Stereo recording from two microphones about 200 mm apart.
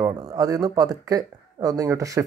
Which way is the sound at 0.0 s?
20° right (ahead or behind).